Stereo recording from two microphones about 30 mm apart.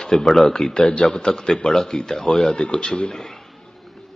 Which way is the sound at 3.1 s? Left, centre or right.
Centre.